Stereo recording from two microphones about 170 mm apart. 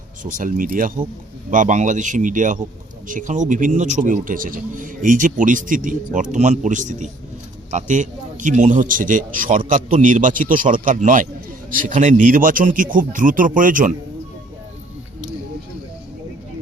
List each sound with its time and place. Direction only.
0.2 s a man's voice: 50° right (ahead or behind)